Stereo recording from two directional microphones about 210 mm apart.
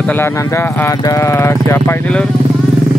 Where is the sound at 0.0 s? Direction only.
10° left (ahead or behind).